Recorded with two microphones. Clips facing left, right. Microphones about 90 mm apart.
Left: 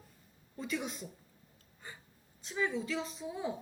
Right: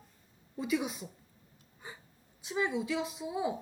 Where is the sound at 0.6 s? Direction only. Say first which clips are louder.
Right 5 dB; 5° right (ahead or behind).